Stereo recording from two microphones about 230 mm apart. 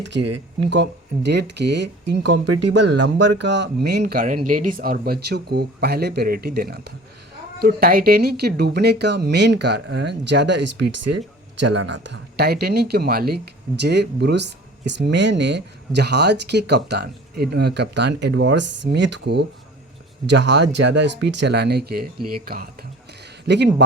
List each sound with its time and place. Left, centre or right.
0.0 s speech: right
10.9 s speech: right
11.8 s speech: right